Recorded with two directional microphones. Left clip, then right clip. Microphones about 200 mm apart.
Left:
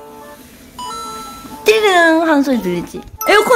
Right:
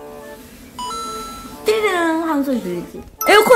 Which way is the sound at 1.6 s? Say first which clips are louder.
Left 7 dB; 40° left (ahead or behind).